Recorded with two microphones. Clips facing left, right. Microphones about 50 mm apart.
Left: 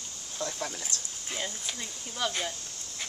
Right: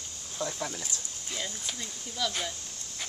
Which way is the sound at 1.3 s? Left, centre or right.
Left.